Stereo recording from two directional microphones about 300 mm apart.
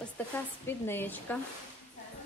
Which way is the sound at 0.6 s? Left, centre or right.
Centre.